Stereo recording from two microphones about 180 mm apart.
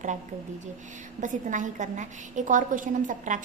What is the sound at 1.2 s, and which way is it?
A woman's voice, 45° right (ahead or behind).